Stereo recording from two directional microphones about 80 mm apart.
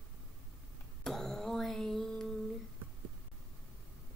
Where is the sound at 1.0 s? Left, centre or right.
Centre.